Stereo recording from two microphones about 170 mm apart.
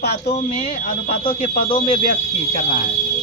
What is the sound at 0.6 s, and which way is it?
Speech, 40° left (ahead or behind).